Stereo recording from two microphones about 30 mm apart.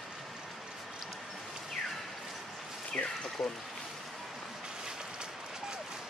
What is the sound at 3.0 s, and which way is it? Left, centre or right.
Speech, left.